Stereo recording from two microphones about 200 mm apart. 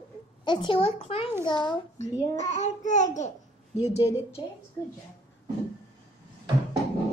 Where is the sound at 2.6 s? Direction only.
35° left (ahead or behind).